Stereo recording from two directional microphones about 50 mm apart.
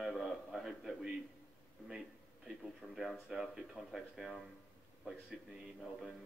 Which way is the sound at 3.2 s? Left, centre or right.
Centre.